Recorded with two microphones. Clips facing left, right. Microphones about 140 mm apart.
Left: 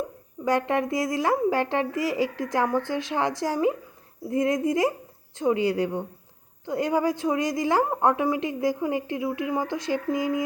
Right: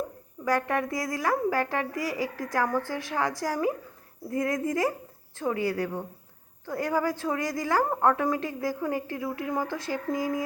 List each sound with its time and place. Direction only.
0.4 s a woman's voice: 20° left (ahead or behind)